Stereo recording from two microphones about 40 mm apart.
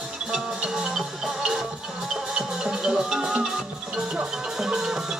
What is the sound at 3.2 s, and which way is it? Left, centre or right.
Music, right.